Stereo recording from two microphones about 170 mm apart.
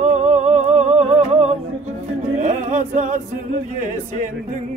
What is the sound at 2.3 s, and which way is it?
Chant, 45° right (ahead or behind).